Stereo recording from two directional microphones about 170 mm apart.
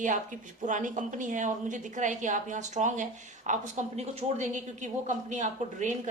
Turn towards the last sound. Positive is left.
turn(degrees=-45)  # may be behind; listen again after turning